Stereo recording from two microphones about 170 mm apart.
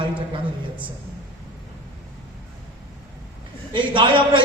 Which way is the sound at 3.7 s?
30° right (ahead or behind).